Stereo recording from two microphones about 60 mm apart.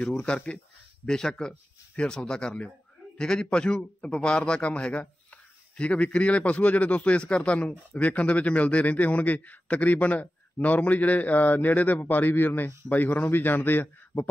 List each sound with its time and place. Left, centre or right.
0.0 s a man's voice: centre; by 14.2 s left